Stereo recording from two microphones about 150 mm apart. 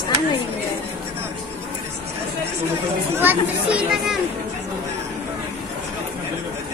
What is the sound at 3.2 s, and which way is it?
Speech, 10° right (ahead or behind).